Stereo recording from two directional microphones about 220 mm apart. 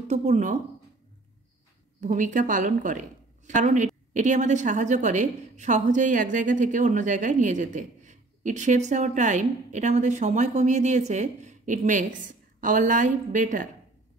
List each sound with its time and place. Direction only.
0.1 s a woman's voice: 30° right (ahead or behind)
2.0 s a woman's voice: 35° right (ahead or behind)